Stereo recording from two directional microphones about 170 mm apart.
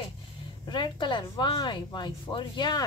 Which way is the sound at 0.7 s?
25° left (ahead or behind).